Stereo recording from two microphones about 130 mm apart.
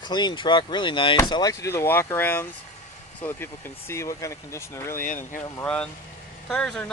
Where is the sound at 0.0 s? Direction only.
35° left (ahead or behind).